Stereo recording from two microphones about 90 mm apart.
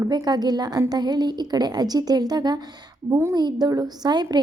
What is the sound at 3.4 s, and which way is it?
A woman's voice, 50° right (ahead or behind).